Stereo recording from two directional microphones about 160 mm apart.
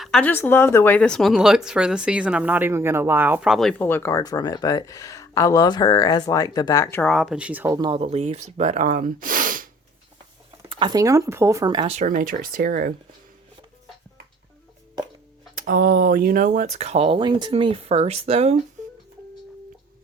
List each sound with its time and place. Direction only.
0.0 s speech: 5° left (ahead or behind); by 3.5 s 10° right (ahead or behind)
3.5 s speech: 5° left (ahead or behind); by 7.0 s 20° left (ahead or behind)
7.0 s speech: centre (ahead or behind)
7.7 s speech: 30° right (ahead or behind); by 9.6 s 60° right (ahead or behind)
10.7 s speech: 30° right (ahead or behind)
11.9 s speech: 50° right (ahead or behind)
15.5 s speech: 65° right (ahead or behind); by 18.5 s 40° right (ahead or behind)